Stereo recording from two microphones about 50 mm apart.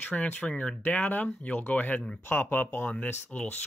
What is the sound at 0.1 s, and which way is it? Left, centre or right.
Speech, left.